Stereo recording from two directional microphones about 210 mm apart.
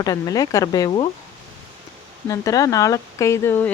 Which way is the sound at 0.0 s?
15° left (ahead or behind).